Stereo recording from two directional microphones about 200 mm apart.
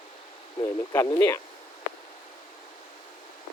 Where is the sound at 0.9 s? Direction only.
15° left (ahead or behind).